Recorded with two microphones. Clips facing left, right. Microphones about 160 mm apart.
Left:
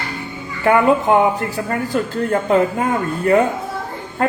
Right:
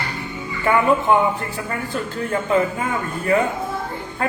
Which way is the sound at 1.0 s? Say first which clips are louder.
Left 3 dB; 40° left (ahead or behind).